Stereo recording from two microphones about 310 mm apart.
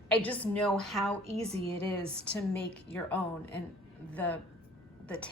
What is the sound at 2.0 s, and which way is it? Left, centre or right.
Speech, centre.